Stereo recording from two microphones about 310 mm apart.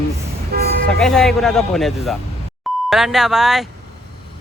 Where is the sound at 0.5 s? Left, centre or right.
Right.